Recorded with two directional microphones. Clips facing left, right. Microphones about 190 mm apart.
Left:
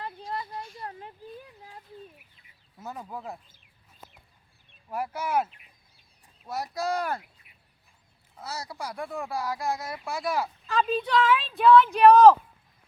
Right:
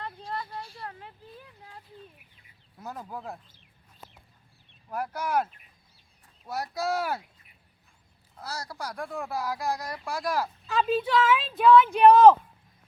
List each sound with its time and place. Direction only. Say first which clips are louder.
0.3 s a sound: even; 25° left (ahead or behind)
2.7 s speech: even; centre (ahead or behind)
4.9 s speech: even; 5° left (ahead or behind)
8.4 s speech: left 1 dB; 5° left (ahead or behind)
10.7 s speech: right 1 dB; 5° right (ahead or behind)